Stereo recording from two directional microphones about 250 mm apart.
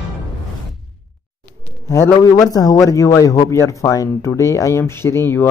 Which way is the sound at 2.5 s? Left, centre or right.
Centre.